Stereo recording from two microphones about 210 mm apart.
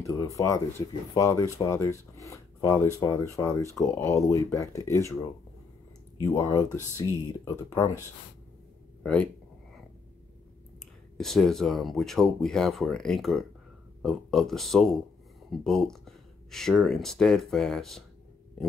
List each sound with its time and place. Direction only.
0.0 s speech: 15° left (ahead or behind)
6.2 s speech: 15° left (ahead or behind)
9.0 s speech: 5° left (ahead or behind)
11.1 s speech: centre (ahead or behind)